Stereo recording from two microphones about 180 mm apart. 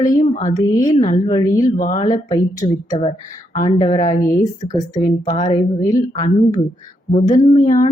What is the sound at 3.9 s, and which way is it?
Speech, 45° left (ahead or behind).